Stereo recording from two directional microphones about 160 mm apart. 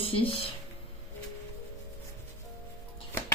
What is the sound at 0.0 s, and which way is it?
Speech, 35° left (ahead or behind).